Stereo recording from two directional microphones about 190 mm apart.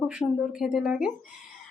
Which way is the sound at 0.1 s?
Centre (ahead or behind).